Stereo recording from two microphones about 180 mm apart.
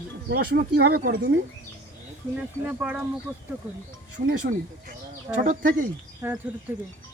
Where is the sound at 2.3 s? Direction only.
10° right (ahead or behind).